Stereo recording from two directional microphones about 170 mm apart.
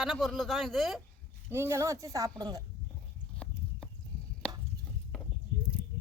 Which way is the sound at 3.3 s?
5° left (ahead or behind).